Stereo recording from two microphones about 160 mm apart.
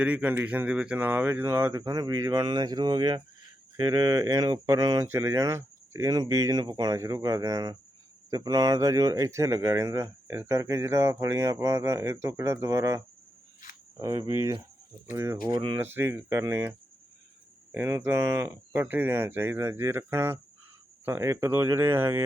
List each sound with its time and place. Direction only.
0.0 s speech: 10° right (ahead or behind)
14.0 s speech: 20° right (ahead or behind)
15.4 s speech: 30° right (ahead or behind)
15.8 s speech: 15° right (ahead or behind)